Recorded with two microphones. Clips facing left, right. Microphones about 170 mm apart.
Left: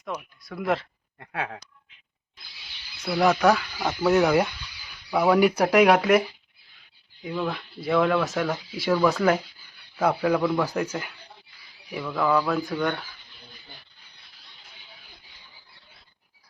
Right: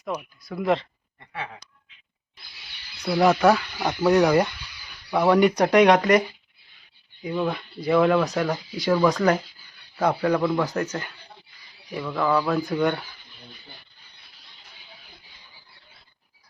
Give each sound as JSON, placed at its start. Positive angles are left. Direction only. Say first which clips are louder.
{"t": 0.4, "sound": "speech", "louder": "right 3 dB", "side_deg": 0}
{"t": 1.2, "sound": "a sound", "louder": "left 3 dB", "side_deg": 75}
{"t": 3.0, "sound": "speech", "louder": "right 2 dB", "side_deg": 0}
{"t": 12.0, "sound": "speech", "louder": "even", "side_deg": 0}